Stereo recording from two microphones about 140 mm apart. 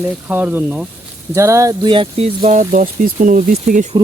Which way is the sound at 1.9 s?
40° right (ahead or behind).